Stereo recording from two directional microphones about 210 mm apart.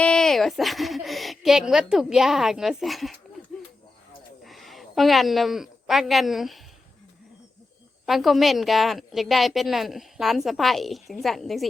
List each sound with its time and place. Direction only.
0.0 s a woman's voice: 5° left (ahead or behind)
4.4 s a woman's voice: centre (ahead or behind)
8.0 s a woman's voice: centre (ahead or behind)